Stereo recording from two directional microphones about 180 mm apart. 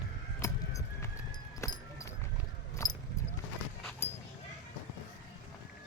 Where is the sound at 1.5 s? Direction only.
15° left (ahead or behind).